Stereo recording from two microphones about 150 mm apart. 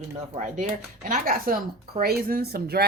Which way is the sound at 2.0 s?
85° right.